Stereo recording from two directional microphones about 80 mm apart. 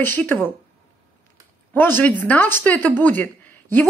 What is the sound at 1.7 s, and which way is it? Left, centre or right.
A woman's voice, left.